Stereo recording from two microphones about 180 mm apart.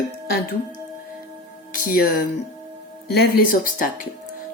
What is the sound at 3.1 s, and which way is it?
Music, 55° left (ahead or behind).